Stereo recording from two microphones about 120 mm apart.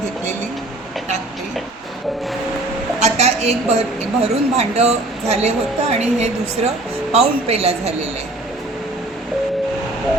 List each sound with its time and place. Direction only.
3.0 s a woman's voice: 65° right (ahead or behind)